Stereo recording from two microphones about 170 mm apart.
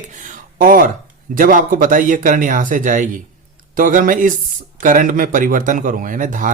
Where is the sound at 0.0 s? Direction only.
50° right (ahead or behind).